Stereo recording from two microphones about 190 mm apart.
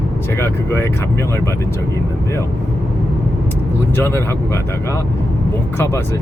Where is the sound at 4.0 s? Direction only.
15° left (ahead or behind).